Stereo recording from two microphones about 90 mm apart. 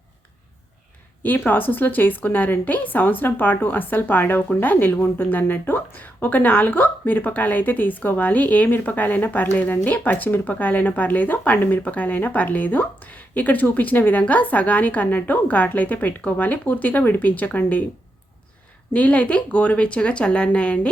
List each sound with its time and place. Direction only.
1.2 s a woman's voice: 20° left (ahead or behind)
18.9 s a woman's voice: 15° left (ahead or behind)